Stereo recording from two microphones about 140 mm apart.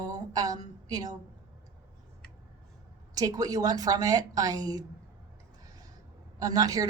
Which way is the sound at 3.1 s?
25° right (ahead or behind).